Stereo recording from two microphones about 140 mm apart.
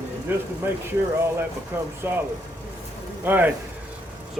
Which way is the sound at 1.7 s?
15° right (ahead or behind).